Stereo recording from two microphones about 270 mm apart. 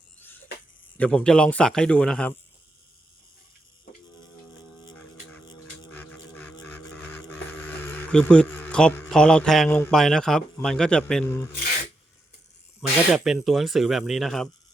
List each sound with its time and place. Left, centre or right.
0.9 s speech: centre
5.5 s a sound: centre
13.1 s speech: centre